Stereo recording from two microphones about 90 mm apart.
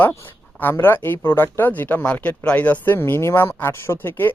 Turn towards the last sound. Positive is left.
turn(degrees=25)  # may be behind; listen again after turning